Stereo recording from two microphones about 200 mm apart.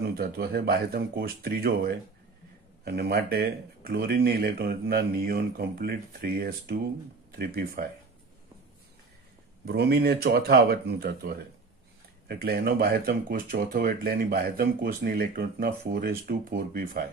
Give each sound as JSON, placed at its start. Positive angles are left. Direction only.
{"t": 0.0, "sound": "speech", "side_deg": -50}
{"t": 9.7, "sound": "speech", "side_deg": -55}